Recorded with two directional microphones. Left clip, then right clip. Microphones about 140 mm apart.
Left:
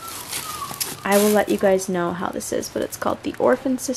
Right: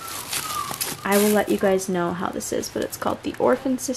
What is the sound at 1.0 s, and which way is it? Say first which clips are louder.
Speech: left 2 dB; 10° left (ahead or behind).